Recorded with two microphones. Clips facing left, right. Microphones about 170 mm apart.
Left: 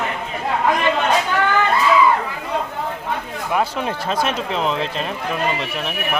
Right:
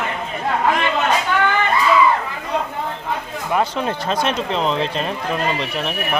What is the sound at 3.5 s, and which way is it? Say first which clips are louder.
Speech: right 1 dB; 5° left (ahead or behind).